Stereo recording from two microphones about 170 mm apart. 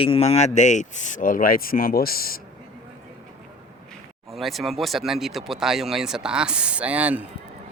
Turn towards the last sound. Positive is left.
turn(degrees=-10)  # may be behind; listen again after turning